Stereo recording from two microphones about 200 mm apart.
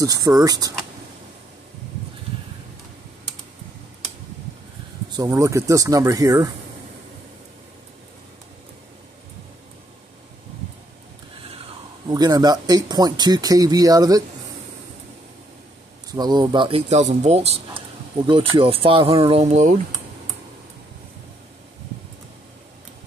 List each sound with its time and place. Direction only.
0.0 s speech: 15° right (ahead or behind)
5.1 s speech: 15° right (ahead or behind)
12.1 s speech: 20° right (ahead or behind)
16.1 s speech: 20° right (ahead or behind); by 19.7 s 35° right (ahead or behind)